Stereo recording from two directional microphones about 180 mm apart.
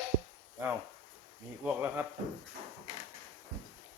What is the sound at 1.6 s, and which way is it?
Speech, 10° right (ahead or behind).